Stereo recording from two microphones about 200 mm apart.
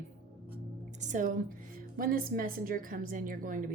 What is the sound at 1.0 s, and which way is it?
A woman's voice, 40° right (ahead or behind).